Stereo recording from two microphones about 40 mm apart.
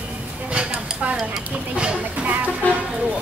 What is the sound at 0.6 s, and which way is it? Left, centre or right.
Speech, right.